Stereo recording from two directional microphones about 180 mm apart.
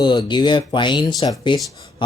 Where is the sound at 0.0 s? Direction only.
25° left (ahead or behind).